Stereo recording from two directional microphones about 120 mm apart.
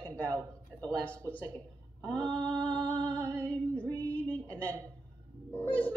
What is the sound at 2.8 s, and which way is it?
Music, 10° left (ahead or behind).